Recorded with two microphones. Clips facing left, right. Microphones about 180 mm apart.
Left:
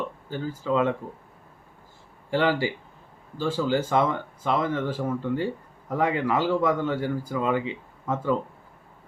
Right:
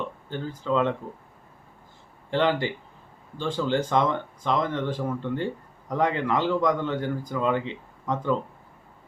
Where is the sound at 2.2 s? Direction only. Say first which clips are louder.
Even; 10° left (ahead or behind).